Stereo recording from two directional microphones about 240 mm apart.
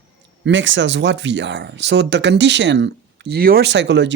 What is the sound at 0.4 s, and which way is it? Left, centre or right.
Speech, right.